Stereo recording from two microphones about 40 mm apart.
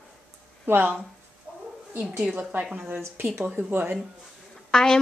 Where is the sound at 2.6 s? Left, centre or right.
Right.